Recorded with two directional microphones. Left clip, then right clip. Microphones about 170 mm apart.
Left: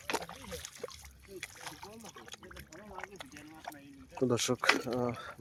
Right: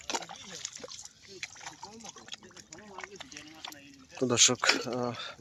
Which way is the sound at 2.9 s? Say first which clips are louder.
Right 2 dB; 80° left.